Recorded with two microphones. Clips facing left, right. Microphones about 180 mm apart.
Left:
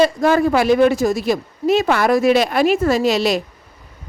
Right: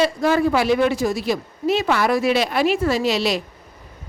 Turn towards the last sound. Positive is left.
turn(degrees=45)  # may be behind; listen again after turning